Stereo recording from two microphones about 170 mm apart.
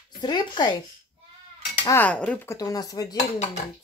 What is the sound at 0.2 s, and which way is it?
Speech, 25° left (ahead or behind).